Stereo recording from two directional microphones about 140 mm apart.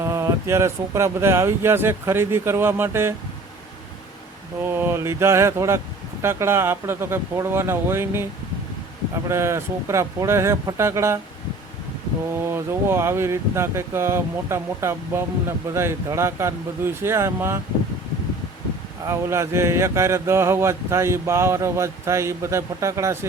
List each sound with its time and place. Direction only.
0.0 s speech: 20° right (ahead or behind)
4.8 s speech: 20° right (ahead or behind)
9.3 s speech: 20° right (ahead or behind)
12.3 s speech: 15° right (ahead or behind)
19.0 s speech: 20° right (ahead or behind)